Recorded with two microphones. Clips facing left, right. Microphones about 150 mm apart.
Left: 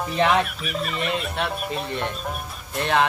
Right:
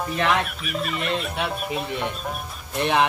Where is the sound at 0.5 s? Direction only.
Centre (ahead or behind).